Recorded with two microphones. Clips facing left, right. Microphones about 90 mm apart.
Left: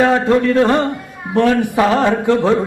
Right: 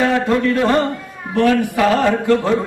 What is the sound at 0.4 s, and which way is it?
Speech, 30° left (ahead or behind).